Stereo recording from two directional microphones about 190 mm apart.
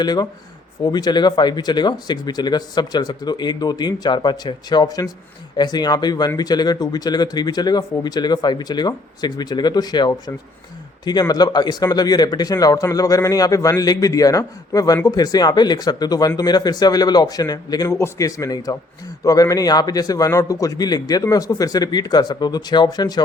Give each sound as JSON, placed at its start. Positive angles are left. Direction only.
{"t": 0.0, "sound": "speech", "side_deg": 20}